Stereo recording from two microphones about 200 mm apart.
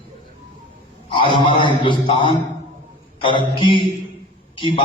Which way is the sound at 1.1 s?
25° left (ahead or behind).